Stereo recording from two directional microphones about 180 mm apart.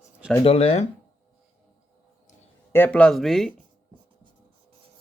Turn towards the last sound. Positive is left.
turn(degrees=0)  # may be behind; listen again after turning